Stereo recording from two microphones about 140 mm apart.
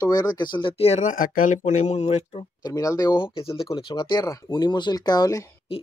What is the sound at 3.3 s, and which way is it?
Speech, 40° left (ahead or behind).